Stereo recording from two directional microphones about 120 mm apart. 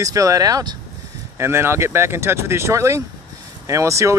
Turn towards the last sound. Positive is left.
turn(degrees=-25)  # may be behind; listen again after turning